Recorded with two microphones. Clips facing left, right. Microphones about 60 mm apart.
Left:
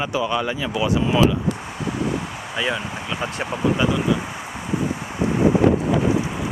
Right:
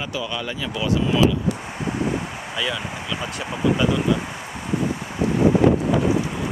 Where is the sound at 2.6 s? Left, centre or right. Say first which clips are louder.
Left 2 dB; left.